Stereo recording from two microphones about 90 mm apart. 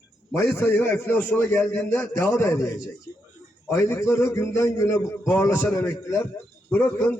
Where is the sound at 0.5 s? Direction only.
25° left (ahead or behind).